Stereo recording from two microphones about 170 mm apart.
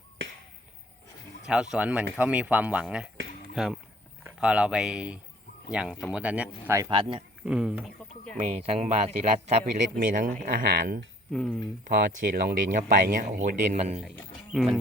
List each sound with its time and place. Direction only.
1.5 s speech: 5° right (ahead or behind)
6.9 s speech: 30° right (ahead or behind)
7.4 s speech: 5° right (ahead or behind)
8.4 s speech: 40° right (ahead or behind)
10.1 s speech: 55° right (ahead or behind)
11.3 s speech: 5° left (ahead or behind)
12.2 s speech: 55° right (ahead or behind)
13.7 s speech: 40° right (ahead or behind)
14.5 s speech: centre (ahead or behind)